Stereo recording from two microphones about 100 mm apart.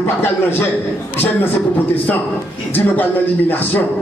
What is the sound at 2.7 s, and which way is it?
Speech, 20° left (ahead or behind).